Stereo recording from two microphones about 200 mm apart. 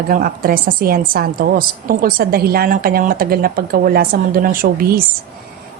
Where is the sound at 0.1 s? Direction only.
45° right (ahead or behind).